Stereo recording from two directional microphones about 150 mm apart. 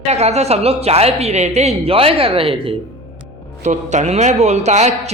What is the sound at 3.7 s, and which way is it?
A woman's voice, 50° right (ahead or behind).